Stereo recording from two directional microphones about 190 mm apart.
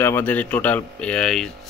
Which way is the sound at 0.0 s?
10° left (ahead or behind).